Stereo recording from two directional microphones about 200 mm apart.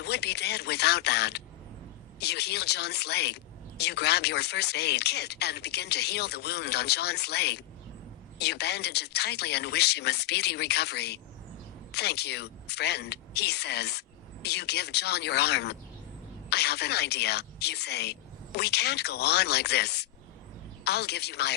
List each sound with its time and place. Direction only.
0.0 s speech: 55° left (ahead or behind)